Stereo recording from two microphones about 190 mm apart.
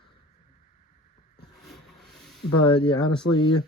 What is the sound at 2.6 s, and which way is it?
Speech, 25° left (ahead or behind).